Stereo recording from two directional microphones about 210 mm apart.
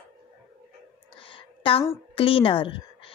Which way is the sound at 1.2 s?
25° left (ahead or behind).